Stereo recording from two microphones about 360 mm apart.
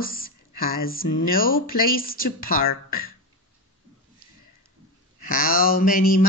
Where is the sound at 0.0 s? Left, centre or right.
Left.